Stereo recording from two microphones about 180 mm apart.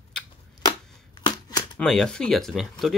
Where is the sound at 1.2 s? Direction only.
20° left (ahead or behind).